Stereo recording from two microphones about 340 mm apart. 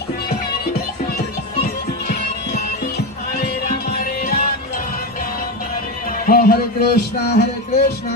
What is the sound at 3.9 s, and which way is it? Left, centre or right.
Music, left.